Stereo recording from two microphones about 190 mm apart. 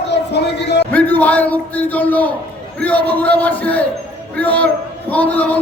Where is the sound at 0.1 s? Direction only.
65° left (ahead or behind).